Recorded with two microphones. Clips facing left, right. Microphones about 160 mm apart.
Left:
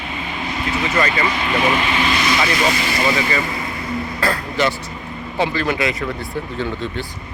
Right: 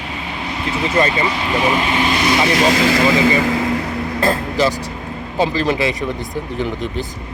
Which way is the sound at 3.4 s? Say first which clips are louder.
Right 8 dB; 90° right.